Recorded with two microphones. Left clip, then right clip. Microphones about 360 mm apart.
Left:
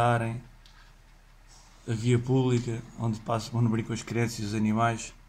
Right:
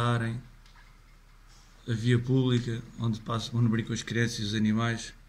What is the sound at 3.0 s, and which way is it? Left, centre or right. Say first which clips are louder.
Speech: left 3 dB; left.